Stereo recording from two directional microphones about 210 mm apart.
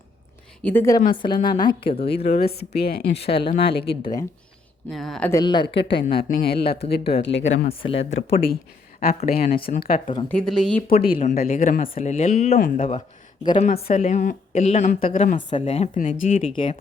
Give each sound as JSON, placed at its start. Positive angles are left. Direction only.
{"t": 0.6, "sound": "a woman's voice", "side_deg": 10}
{"t": 2.2, "sound": "a woman's voice", "side_deg": 50}
{"t": 3.8, "sound": "speech", "side_deg": 20}
{"t": 4.9, "sound": "speech", "side_deg": 0}
{"t": 5.3, "sound": "speech", "side_deg": 20}
{"t": 6.3, "sound": "a woman's voice", "side_deg": 50}
{"t": 7.4, "sound": "speech", "side_deg": 30}
{"t": 8.1, "sound": "a woman's voice", "side_deg": 50}
{"t": 10.2, "sound": "speech", "side_deg": 5}
{"t": 11.0, "sound": "speech", "side_deg": 40}
{"t": 13.4, "sound": "speech", "side_deg": 20}
{"t": 15.4, "sound": "speech", "side_deg": 25}